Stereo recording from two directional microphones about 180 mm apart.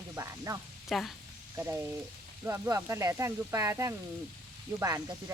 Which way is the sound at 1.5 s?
15° right (ahead or behind).